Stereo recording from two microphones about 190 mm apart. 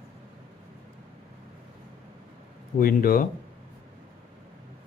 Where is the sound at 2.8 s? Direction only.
50° left (ahead or behind).